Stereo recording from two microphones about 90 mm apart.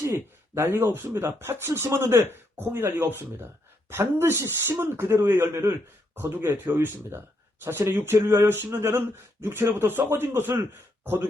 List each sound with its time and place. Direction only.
0.0 s a man's voice: 35° right (ahead or behind)
6.7 s speech: 25° right (ahead or behind)